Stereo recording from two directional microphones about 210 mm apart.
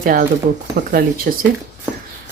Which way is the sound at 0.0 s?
40° right (ahead or behind).